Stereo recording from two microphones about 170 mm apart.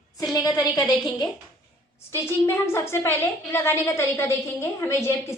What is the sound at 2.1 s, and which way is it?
A woman's voice, 15° left (ahead or behind).